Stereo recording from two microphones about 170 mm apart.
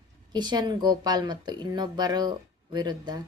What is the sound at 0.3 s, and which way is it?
Speech, 25° right (ahead or behind).